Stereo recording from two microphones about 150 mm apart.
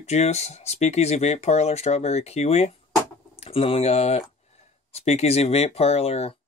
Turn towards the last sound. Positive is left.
turn(degrees=45)  # may be behind; listen again after turning